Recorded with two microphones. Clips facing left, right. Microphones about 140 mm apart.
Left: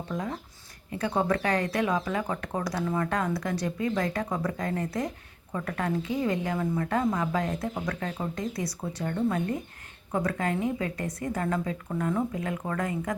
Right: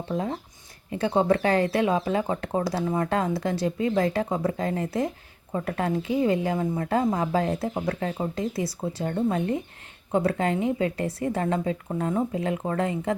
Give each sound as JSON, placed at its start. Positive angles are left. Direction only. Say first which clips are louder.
{"t": 0.1, "sound": "speech", "louder": "right 6 dB", "side_deg": -30}